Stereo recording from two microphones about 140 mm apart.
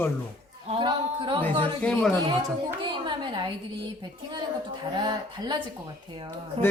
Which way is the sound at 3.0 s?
35° right (ahead or behind).